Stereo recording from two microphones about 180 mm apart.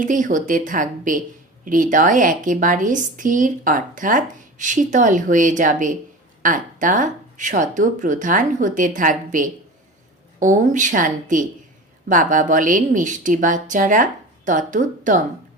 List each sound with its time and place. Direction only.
0.0 s a woman's voice: 45° right (ahead or behind)